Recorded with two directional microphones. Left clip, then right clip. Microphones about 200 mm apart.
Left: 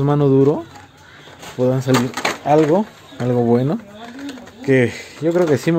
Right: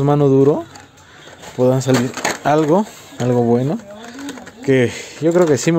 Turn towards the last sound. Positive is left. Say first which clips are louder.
# right 2 dB
turn(degrees=-15)  # may be behind; listen again after turning